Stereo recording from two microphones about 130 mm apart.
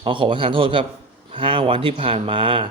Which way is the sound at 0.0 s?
40° right (ahead or behind).